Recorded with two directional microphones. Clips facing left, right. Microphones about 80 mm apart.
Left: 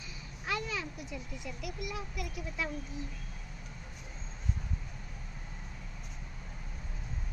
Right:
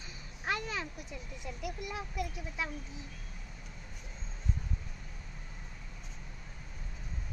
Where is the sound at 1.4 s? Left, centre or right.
Right.